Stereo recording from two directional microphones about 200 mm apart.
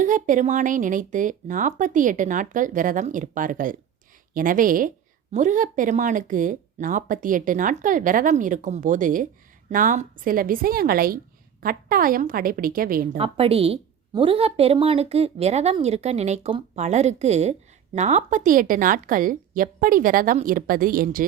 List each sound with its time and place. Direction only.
0.0 s a woman's voice: 40° right (ahead or behind)
13.1 s a woman's voice: 30° right (ahead or behind); by 21.2 s 45° right (ahead or behind)